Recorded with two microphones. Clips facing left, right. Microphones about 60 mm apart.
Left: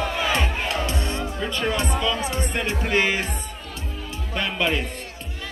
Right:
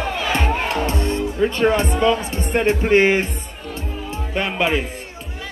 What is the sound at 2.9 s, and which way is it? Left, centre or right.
Speech, right.